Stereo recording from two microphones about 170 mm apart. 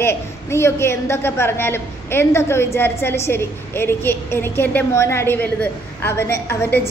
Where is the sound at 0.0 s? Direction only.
15° left (ahead or behind).